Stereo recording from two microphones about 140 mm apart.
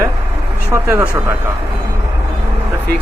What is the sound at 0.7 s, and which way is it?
Speech, 20° right (ahead or behind).